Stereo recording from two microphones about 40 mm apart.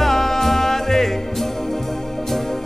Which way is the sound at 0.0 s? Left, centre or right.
Centre.